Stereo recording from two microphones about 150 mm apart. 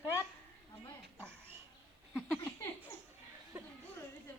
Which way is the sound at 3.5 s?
15° right (ahead or behind).